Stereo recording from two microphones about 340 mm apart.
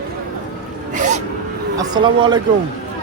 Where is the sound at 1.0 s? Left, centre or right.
Right.